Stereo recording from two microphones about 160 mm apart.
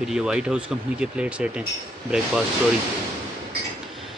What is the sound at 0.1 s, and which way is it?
Speech, 5° right (ahead or behind).